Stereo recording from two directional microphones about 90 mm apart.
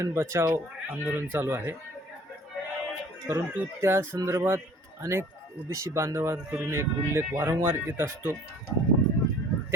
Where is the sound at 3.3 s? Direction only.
30° right (ahead or behind).